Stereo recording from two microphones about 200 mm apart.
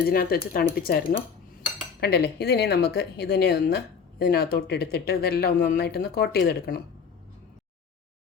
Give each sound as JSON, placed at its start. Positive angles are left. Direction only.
{"t": 0.0, "sound": "speech", "side_deg": 50}